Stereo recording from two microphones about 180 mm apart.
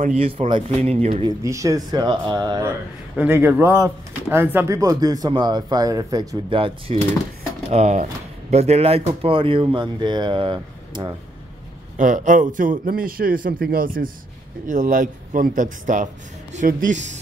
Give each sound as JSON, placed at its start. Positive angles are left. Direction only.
{"t": 0.0, "sound": "speech", "side_deg": -35}
{"t": 1.4, "sound": "speech", "side_deg": -20}
{"t": 7.7, "sound": "speech", "side_deg": -40}
{"t": 12.0, "sound": "a man's voice", "side_deg": -45}